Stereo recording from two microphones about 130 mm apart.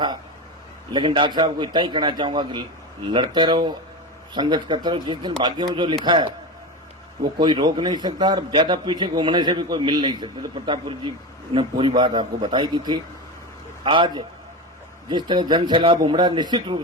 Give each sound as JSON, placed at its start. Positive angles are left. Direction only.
{"t": 0.9, "sound": "a man's voice", "side_deg": -40}
{"t": 7.3, "sound": "a man's voice", "side_deg": -35}